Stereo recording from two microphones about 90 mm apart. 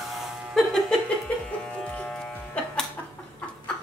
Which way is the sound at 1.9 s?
15° left (ahead or behind).